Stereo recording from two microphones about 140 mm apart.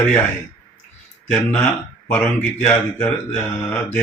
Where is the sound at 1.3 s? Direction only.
10° left (ahead or behind).